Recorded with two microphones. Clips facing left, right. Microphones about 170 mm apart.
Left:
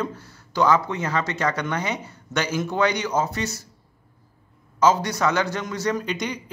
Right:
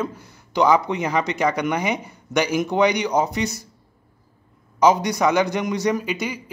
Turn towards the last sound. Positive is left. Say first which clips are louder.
# right 2 dB
turn(degrees=-5)  # may be behind; listen again after turning